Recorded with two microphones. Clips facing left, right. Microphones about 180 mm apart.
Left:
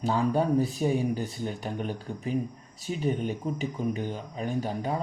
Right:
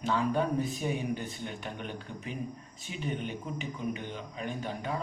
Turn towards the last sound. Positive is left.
turn(degrees=40)  # may be behind; listen again after turning